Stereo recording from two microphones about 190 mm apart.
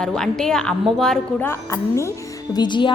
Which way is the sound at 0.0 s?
5° left (ahead or behind).